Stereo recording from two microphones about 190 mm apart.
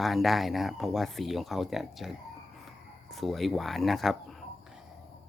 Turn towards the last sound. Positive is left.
turn(degrees=0)  # may be behind; listen again after turning